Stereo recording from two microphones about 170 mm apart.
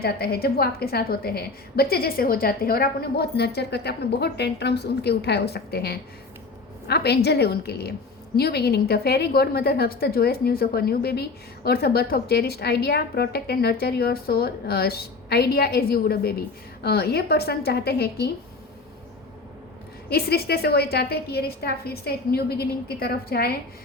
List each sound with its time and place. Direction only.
0.0 s a woman's voice: 65° left (ahead or behind)
20.1 s a woman's voice: 70° left (ahead or behind)